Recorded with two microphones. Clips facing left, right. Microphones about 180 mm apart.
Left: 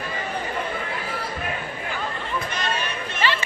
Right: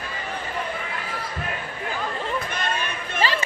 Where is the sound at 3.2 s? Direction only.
35° right (ahead or behind).